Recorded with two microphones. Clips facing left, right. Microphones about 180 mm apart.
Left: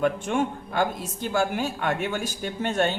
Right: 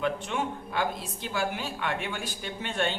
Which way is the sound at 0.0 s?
50° left (ahead or behind).